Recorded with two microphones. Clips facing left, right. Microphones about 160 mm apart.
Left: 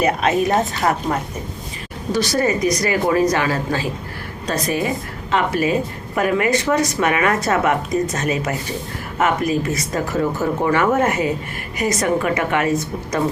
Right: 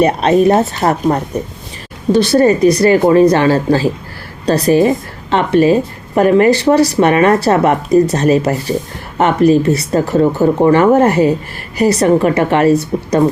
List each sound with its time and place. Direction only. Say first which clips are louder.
0.0 s speech: right 7 dB; 30° right (ahead or behind)
2.1 s speech: right 9 dB; 30° right (ahead or behind)